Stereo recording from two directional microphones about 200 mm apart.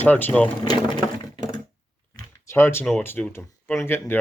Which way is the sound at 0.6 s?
20° left (ahead or behind).